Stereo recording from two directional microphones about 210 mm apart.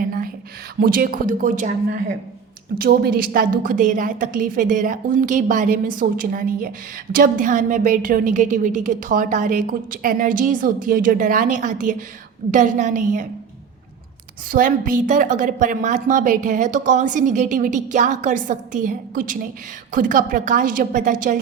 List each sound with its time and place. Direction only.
0.0 s a sound: 40° right (ahead or behind)
0.8 s a woman's voice: 40° right (ahead or behind)
2.7 s a woman's voice: 45° right (ahead or behind)
14.5 s a woman's voice: 40° right (ahead or behind)